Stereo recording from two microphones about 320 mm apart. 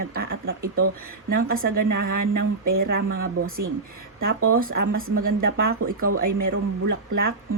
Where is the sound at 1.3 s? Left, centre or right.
Right.